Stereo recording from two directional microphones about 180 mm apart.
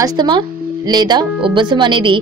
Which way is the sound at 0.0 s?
25° right (ahead or behind).